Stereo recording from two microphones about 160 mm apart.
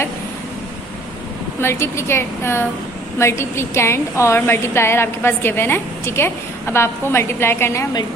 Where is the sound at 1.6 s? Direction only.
15° left (ahead or behind).